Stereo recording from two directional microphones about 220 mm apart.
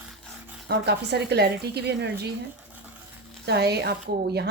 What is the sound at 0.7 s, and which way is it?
A woman's voice, 50° right (ahead or behind).